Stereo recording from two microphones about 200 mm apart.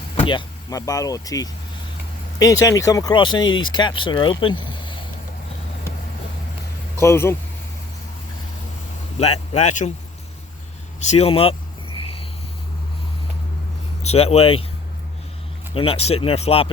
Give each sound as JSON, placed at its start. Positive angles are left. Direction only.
{"t": 0.2, "sound": "speech", "side_deg": 25}
{"t": 7.0, "sound": "speech", "side_deg": 15}
{"t": 9.1, "sound": "speech", "side_deg": 30}
{"t": 11.1, "sound": "speech", "side_deg": 30}
{"t": 14.0, "sound": "speech", "side_deg": 30}
{"t": 15.7, "sound": "speech", "side_deg": 30}